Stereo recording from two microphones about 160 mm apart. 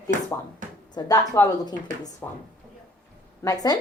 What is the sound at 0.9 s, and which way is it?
Speech, 25° left (ahead or behind).